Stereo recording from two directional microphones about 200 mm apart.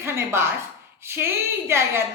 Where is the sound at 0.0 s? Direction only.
10° right (ahead or behind).